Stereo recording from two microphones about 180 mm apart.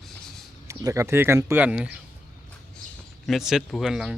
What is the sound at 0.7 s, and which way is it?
Speech, 15° right (ahead or behind).